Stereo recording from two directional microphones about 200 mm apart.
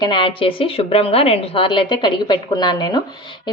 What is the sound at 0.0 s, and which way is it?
A woman's voice, 25° left (ahead or behind).